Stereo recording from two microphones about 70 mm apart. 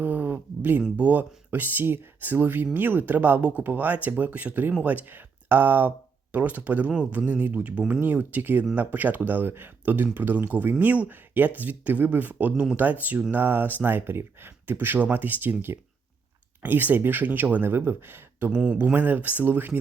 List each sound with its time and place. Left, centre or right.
0.0 s a sound: right
0.8 s speech: right
18.6 s speech: centre